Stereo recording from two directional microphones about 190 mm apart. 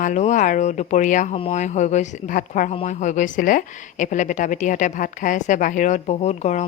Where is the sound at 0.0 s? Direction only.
40° left (ahead or behind).